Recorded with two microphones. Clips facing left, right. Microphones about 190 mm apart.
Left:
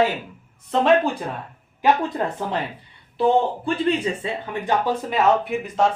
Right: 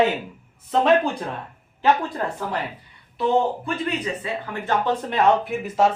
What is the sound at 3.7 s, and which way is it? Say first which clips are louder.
Speech: left 4 dB; 30° left (ahead or behind).